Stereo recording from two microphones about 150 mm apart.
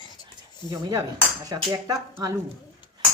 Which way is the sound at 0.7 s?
20° right (ahead or behind).